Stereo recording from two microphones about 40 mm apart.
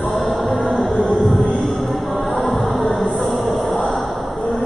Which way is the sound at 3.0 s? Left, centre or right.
Centre.